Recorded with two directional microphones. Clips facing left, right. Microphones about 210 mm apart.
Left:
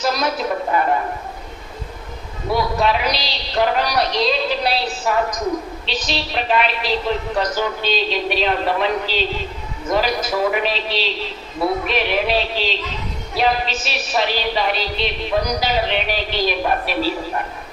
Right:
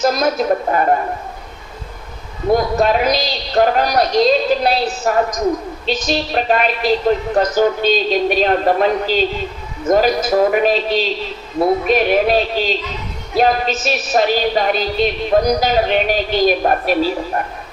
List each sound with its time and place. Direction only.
0.0 s a woman's voice: 45° right (ahead or behind)
2.5 s a woman's voice: 45° right (ahead or behind)